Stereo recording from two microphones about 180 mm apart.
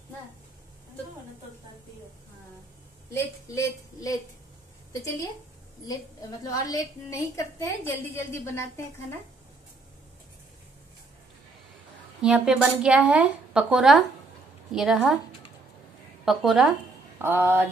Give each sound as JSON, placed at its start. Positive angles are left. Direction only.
{"t": 3.1, "sound": "a woman's voice", "side_deg": 15}
{"t": 6.4, "sound": "a woman's voice", "side_deg": 20}
{"t": 12.2, "sound": "a woman's voice", "side_deg": -5}
{"t": 16.3, "sound": "a woman's voice", "side_deg": 0}
{"t": 17.2, "sound": "a sound", "side_deg": -10}